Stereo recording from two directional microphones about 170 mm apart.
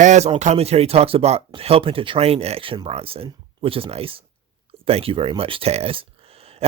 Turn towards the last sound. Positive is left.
turn(degrees=-35)  # may be behind; listen again after turning